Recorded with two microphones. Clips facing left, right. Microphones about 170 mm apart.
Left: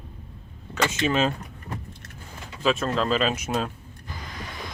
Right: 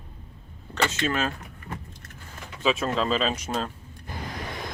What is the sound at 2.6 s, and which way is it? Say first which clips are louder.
Speech: left 1 dB; centre (ahead or behind).